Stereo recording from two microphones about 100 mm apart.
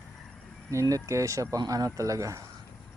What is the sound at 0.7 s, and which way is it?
Speech, 30° right (ahead or behind).